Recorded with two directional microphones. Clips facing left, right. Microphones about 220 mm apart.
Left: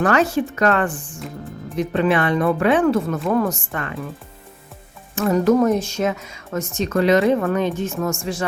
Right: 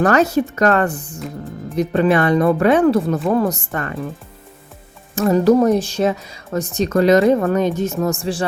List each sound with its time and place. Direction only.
0.0 s speech: 40° right (ahead or behind)
5.1 s speech: 35° right (ahead or behind)